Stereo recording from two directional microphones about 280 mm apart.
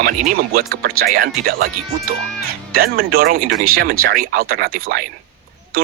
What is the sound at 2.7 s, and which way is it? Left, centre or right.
Speech, right.